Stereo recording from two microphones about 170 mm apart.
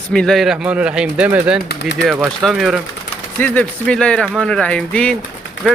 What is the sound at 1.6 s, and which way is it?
Speech, 75° left (ahead or behind).